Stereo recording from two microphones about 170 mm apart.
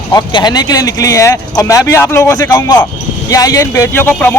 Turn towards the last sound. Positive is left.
turn(degrees=10)  # may be behind; listen again after turning